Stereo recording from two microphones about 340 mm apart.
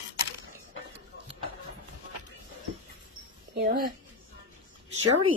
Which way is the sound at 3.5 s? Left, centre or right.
Right.